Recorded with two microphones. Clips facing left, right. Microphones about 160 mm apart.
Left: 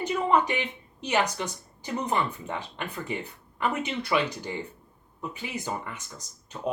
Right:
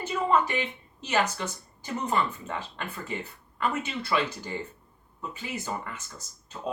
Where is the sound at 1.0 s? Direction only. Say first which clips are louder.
Left 1 dB; 15° left (ahead or behind).